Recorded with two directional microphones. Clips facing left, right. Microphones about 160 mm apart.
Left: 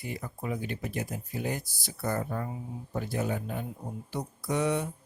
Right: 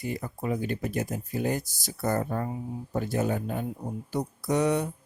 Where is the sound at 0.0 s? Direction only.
45° right (ahead or behind).